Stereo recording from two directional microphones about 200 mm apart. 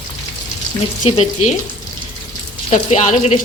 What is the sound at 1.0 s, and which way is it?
Frying, 30° left (ahead or behind).